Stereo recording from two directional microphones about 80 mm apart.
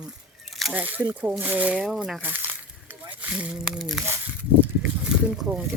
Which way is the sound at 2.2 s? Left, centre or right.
Right.